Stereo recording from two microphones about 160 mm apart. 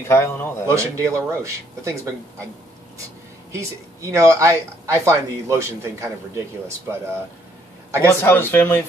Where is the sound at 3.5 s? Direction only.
20° right (ahead or behind).